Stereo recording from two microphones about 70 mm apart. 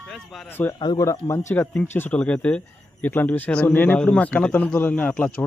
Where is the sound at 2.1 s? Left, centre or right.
Centre.